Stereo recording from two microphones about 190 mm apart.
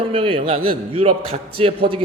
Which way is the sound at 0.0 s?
30° right (ahead or behind).